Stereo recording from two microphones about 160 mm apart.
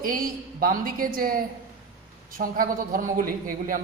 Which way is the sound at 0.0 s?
60° right (ahead or behind).